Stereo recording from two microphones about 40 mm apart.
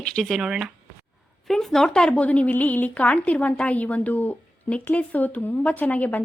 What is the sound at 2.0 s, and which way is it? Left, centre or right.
A woman's voice, left.